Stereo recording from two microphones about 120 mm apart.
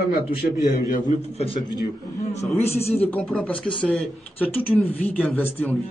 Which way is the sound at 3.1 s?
10° left (ahead or behind).